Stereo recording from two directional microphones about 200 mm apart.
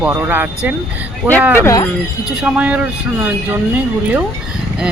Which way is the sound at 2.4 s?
5° right (ahead or behind).